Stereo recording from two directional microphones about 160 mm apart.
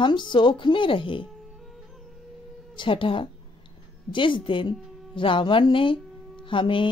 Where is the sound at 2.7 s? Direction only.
30° left (ahead or behind).